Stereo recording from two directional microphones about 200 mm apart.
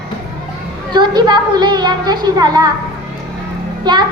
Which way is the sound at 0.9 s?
20° right (ahead or behind).